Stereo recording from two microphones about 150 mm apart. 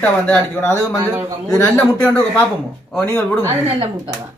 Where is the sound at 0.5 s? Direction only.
15° left (ahead or behind).